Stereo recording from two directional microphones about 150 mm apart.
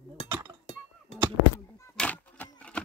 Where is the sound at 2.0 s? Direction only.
10° left (ahead or behind).